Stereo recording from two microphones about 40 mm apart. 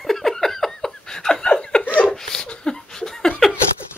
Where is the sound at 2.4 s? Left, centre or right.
Left.